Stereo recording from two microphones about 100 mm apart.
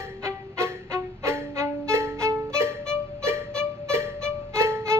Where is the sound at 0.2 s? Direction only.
30° right (ahead or behind).